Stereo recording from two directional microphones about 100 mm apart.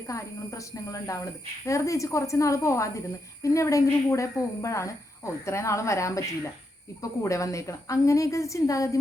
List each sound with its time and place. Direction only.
0.1 s a woman's voice: 35° left (ahead or behind)